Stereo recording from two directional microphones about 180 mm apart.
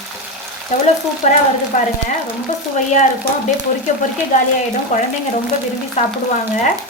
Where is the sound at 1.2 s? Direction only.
40° left (ahead or behind).